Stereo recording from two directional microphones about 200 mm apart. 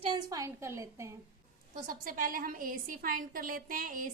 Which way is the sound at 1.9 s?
45° right (ahead or behind).